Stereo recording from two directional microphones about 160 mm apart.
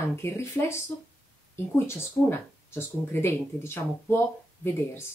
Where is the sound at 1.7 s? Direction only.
15° left (ahead or behind).